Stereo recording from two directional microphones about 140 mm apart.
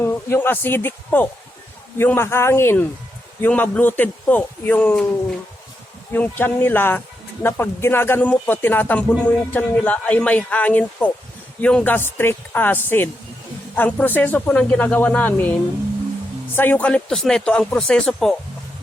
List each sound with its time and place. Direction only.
0.0 s speech: 15° left (ahead or behind)
6.1 s speech: 15° left (ahead or behind)
16.6 s speech: 10° left (ahead or behind)